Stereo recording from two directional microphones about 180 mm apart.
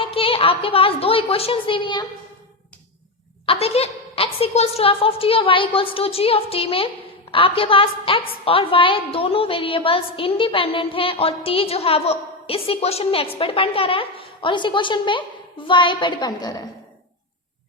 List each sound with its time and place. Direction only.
0.0 s a woman's voice: 30° left (ahead or behind)
3.4 s a woman's voice: 30° left (ahead or behind)